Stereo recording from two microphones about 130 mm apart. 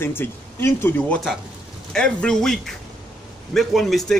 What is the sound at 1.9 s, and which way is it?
A man's voice, 5° left (ahead or behind).